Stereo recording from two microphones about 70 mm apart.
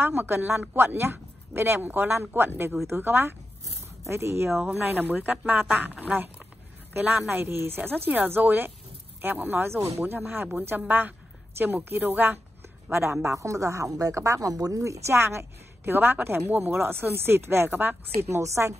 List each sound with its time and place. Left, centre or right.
0.0 s speech: right
4.6 s a woman's voice: right
12.9 s speech: right
18.4 s a woman's voice: right